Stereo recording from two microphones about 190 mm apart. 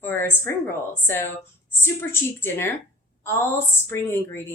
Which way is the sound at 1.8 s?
10° left (ahead or behind).